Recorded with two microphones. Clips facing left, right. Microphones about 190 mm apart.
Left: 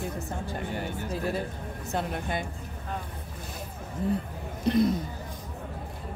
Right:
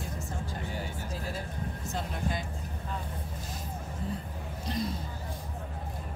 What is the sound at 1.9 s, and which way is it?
Music, 60° left (ahead or behind).